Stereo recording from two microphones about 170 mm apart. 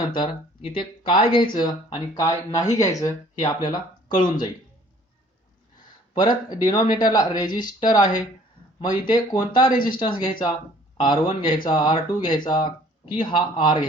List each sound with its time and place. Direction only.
0.1 s speech: 30° left (ahead or behind)
6.1 s speech: 25° left (ahead or behind)